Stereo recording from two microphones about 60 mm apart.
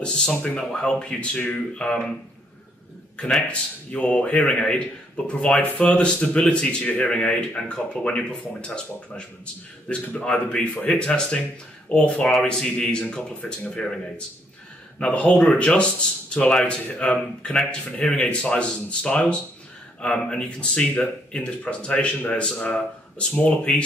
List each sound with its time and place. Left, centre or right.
0.0 s speech: centre
3.4 s speech: centre